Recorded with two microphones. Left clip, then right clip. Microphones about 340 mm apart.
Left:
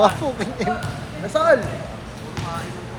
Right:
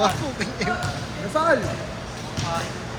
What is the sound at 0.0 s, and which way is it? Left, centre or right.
Speech, centre.